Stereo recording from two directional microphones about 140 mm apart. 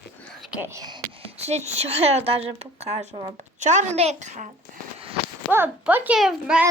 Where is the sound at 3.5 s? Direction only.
60° right (ahead or behind).